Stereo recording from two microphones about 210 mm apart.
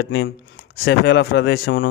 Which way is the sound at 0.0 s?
50° left (ahead or behind).